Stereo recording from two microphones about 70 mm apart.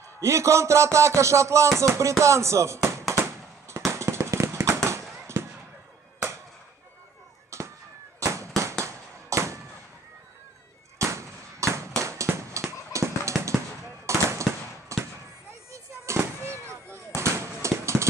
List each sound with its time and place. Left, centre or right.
0.2 s a man's voice: right
3.9 s firecracker: right
7.5 s fireworks: right
8.2 s a sound: right
11.0 s firecracker: right
12.9 s a sound: right
14.0 s fireworks: right
16.2 s fireworks: right